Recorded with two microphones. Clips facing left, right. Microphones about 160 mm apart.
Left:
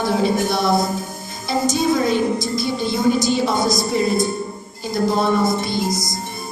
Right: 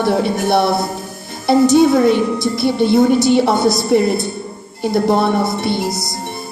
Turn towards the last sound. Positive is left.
turn(degrees=-65)  # may be behind; listen again after turning